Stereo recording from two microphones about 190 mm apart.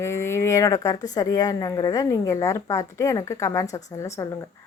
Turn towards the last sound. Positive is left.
turn(degrees=15)  # may be behind; listen again after turning